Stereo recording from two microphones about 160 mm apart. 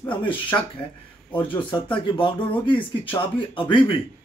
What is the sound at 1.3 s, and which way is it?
Speech, 30° left (ahead or behind).